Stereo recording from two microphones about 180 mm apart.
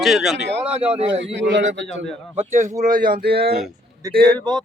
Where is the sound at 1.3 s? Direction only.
85° right.